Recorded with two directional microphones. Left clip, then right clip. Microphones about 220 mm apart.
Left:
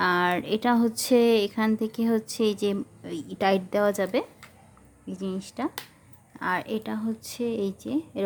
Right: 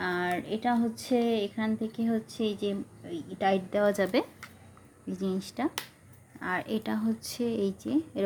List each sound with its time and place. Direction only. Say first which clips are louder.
0.0 s speech: left 7 dB; 25° left (ahead or behind); by 8.2 s 10° left (ahead or behind)